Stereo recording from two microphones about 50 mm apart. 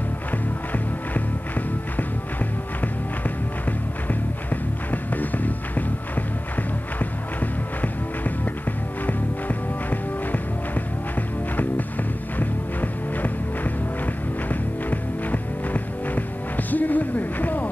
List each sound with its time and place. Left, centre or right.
0.7 s music: left
4.1 s music: left
12.4 s music: left